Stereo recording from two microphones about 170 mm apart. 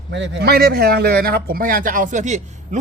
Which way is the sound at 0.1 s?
90° right.